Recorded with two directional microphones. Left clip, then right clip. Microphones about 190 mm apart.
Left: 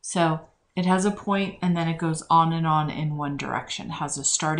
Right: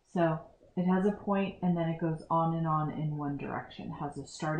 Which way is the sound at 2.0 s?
20° left (ahead or behind).